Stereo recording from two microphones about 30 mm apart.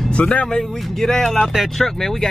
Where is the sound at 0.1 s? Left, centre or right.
Left.